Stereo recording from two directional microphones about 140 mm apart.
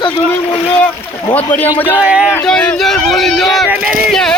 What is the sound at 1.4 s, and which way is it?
Speech, 10° left (ahead or behind).